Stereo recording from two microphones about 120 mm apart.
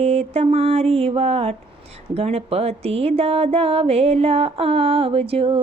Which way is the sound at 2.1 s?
55° right (ahead or behind).